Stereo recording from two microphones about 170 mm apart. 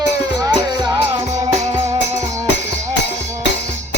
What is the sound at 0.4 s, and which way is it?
Music, 25° right (ahead or behind).